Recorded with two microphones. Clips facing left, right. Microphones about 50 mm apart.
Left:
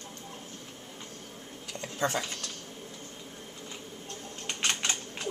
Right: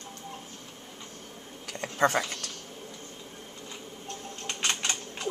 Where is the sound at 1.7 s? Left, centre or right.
Right.